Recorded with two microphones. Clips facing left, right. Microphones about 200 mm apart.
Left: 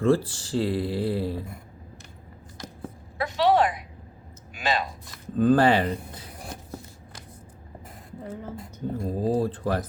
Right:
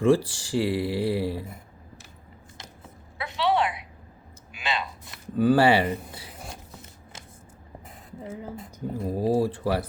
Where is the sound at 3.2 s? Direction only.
45° left (ahead or behind).